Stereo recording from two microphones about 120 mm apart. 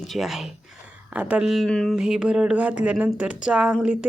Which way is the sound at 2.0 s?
5° right (ahead or behind).